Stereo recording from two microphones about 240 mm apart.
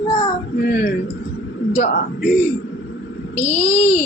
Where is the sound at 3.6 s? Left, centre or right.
Left.